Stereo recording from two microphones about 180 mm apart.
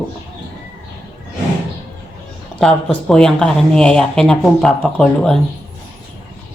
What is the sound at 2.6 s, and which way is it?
Speech, 5° left (ahead or behind).